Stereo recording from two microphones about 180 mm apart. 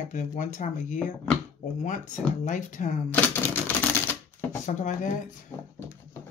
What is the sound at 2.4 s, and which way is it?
Speech, 45° left (ahead or behind).